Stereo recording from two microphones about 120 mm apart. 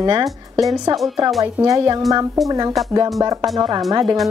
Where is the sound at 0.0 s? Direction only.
35° right (ahead or behind).